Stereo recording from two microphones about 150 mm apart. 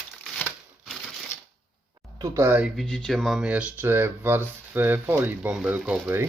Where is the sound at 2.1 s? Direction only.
20° right (ahead or behind).